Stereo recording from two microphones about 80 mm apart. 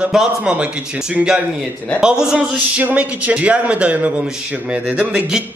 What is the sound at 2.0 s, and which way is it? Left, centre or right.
Speech, centre.